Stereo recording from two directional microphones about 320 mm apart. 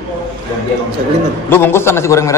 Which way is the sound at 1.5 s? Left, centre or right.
Centre.